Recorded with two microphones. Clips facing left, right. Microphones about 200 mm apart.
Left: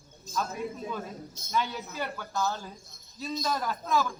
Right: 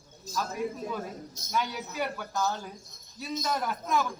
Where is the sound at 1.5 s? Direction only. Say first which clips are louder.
Even; 10° right (ahead or behind).